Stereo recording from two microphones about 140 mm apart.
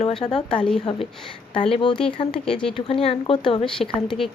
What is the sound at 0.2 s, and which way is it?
Speech, 50° left (ahead or behind).